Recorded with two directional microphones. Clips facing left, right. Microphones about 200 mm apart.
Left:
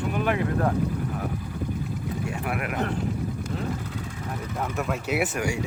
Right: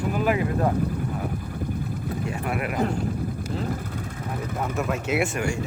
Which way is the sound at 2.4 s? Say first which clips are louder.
Right 3 dB; centre (ahead or behind).